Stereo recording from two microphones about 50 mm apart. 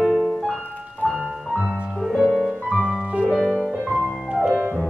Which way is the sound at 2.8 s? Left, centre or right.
Right.